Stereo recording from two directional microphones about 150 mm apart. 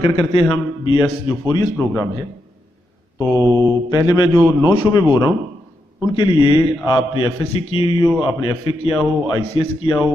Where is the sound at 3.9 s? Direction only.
30° left (ahead or behind).